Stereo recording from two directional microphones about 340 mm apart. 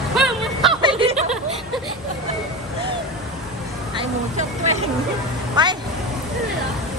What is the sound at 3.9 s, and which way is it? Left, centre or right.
Vehicle, centre.